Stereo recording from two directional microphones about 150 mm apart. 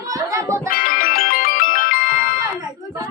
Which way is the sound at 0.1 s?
20° right (ahead or behind).